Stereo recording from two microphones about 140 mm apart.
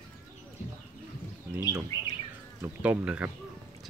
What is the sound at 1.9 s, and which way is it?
Bird, 25° left (ahead or behind).